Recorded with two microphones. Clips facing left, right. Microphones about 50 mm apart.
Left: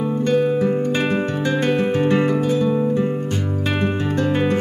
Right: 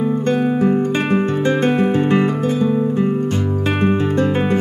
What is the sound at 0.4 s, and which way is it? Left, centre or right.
Music, right.